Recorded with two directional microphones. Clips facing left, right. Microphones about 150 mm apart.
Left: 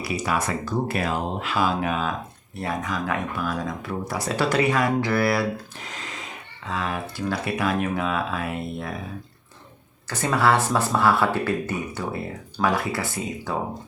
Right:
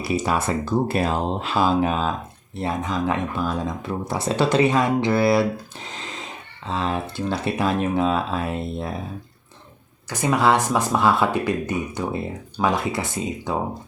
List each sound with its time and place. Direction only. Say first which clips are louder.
0.0 s speech: right 3 dB; 25° right (ahead or behind)
10.1 s speech: right 2 dB; 15° right (ahead or behind)